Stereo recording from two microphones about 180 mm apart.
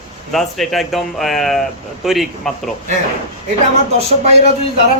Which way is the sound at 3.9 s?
35° right (ahead or behind).